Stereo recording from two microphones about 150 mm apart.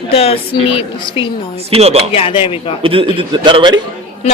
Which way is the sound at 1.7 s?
45° right (ahead or behind).